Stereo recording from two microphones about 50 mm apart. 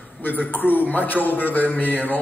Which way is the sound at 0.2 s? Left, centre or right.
Left.